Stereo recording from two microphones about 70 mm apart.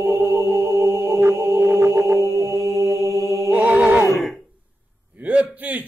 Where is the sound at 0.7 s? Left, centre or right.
Right.